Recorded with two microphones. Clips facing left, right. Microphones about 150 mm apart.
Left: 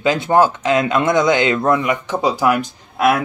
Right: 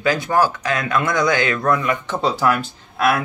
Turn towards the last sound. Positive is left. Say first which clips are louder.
# left 3 dB
turn(degrees=20)  # may be behind; listen again after turning